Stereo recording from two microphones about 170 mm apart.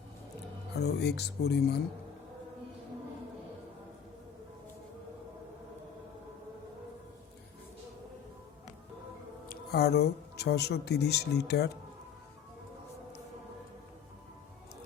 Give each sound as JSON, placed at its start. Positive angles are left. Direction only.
{"t": 0.8, "sound": "speech", "side_deg": 75}
{"t": 9.5, "sound": "speech", "side_deg": 70}